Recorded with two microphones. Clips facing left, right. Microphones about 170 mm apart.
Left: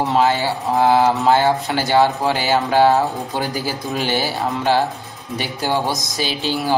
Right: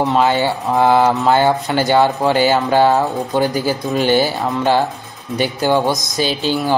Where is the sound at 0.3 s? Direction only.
65° right (ahead or behind).